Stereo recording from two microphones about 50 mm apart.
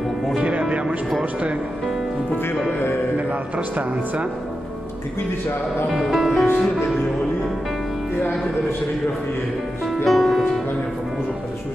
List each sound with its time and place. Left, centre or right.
0.4 s music: right
3.2 s speech: right
5.9 s speech: centre
10.0 s music: centre